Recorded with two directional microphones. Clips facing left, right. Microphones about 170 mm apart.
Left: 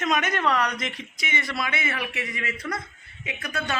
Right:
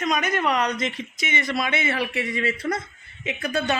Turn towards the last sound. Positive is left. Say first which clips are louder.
# right 6 dB
turn(degrees=-30)  # may be behind; listen again after turning